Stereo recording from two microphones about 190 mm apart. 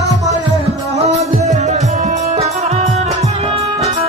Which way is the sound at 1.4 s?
35° right (ahead or behind).